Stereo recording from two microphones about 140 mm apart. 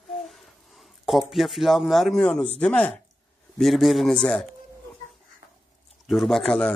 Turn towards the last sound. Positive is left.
turn(degrees=5)  # may be behind; listen again after turning